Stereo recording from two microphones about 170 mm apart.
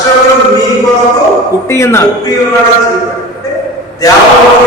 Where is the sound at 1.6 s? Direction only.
15° left (ahead or behind).